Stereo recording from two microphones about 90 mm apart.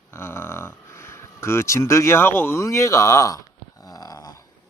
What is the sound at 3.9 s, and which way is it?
Snoring, 45° left (ahead or behind).